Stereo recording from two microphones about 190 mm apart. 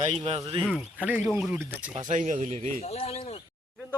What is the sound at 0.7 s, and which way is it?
Speech, 5° right (ahead or behind).